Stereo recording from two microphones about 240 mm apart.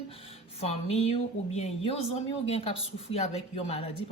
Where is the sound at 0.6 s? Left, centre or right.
Left.